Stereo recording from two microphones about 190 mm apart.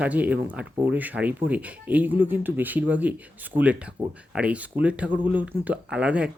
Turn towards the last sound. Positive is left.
turn(degrees=-5)  # may be behind; listen again after turning